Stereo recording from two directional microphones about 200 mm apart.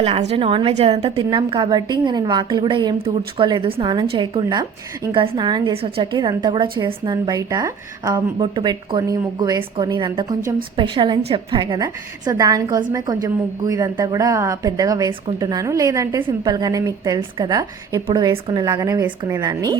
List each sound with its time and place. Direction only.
0.0 s a woman's voice: 30° right (ahead or behind)
1.0 s a woman's voice: 20° right (ahead or behind)